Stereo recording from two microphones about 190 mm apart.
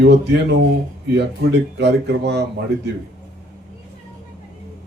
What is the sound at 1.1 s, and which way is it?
Speech, 65° right (ahead or behind).